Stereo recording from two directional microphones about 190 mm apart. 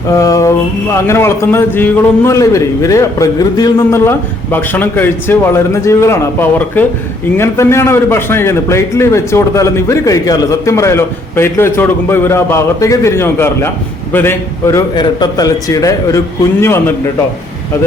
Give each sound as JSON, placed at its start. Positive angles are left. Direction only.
{"t": 0.1, "sound": "a man's voice", "side_deg": 15}